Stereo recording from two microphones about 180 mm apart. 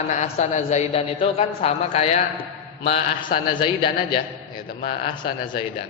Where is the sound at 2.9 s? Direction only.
30° left (ahead or behind).